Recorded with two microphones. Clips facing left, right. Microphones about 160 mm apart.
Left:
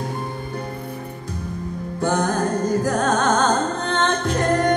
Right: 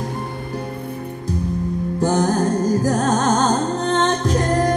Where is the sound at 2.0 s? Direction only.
40° right (ahead or behind).